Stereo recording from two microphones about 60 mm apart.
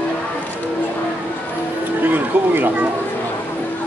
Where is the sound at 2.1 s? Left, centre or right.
Right.